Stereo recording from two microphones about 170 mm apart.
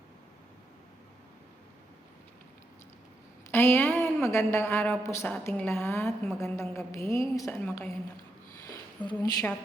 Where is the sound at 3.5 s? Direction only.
15° left (ahead or behind).